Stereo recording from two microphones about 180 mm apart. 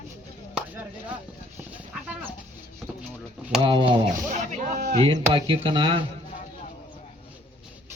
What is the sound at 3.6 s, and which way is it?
Speech, 30° right (ahead or behind).